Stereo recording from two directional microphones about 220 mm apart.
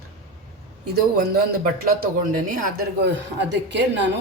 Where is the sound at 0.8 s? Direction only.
45° right (ahead or behind).